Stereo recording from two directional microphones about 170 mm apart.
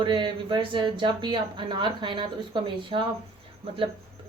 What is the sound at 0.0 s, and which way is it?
Speech, 30° right (ahead or behind).